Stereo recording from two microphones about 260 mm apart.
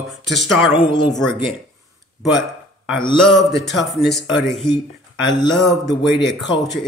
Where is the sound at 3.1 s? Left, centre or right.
Centre.